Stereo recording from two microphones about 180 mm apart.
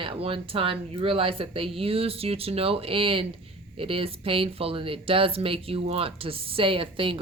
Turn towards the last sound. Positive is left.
turn(degrees=-30)  # may be behind; listen again after turning